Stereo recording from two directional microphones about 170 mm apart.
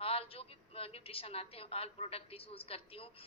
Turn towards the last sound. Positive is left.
turn(degrees=35)  # may be behind; listen again after turning